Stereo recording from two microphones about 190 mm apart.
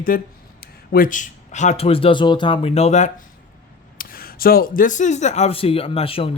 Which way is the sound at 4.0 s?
50° left (ahead or behind).